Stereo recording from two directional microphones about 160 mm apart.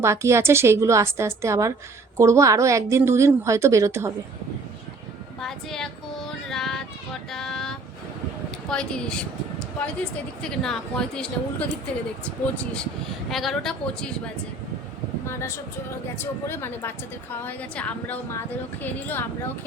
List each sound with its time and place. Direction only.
0.0 s a woman's voice: 15° right (ahead or behind)
5.4 s a sound: centre (ahead or behind)
8.7 s a woman's voice: 5° left (ahead or behind)
13.3 s a woman's voice: centre (ahead or behind)
15.3 s a woman's voice: 15° left (ahead or behind)